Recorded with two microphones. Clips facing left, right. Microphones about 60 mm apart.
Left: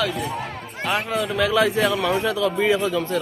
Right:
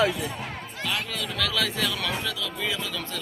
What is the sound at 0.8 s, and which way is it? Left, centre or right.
A man's voice, left.